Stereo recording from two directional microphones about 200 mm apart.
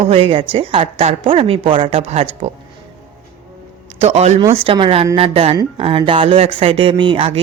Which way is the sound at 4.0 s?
35° right (ahead or behind).